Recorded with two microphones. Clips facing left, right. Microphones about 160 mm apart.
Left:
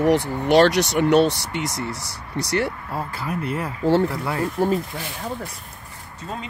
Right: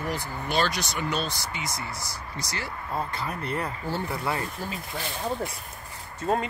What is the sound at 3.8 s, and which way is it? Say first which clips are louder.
Speech: left 12 dB; 90° left.